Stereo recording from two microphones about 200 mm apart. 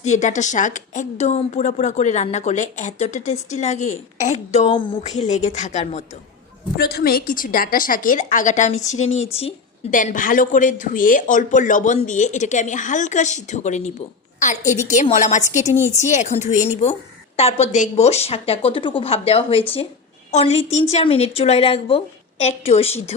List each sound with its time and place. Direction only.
0.0 s a woman's voice: 35° left (ahead or behind)
6.7 s a woman's voice: 50° left (ahead or behind); by 23.1 s 30° left (ahead or behind)